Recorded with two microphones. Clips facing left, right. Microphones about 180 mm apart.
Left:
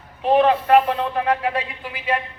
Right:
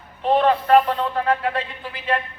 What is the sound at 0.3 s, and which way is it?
A man's voice, 15° left (ahead or behind).